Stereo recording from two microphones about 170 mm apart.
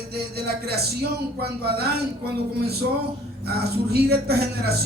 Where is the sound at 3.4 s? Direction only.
70° right (ahead or behind).